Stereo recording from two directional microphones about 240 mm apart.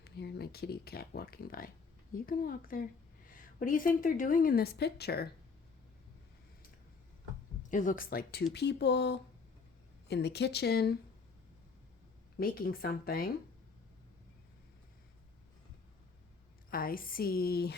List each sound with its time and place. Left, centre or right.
0.0 s a woman's voice: left
7.7 s a woman's voice: left
12.4 s a woman's voice: left
16.6 s a woman's voice: left